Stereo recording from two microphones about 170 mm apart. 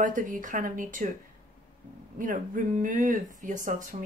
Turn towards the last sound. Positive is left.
turn(degrees=-50)  # may be behind; listen again after turning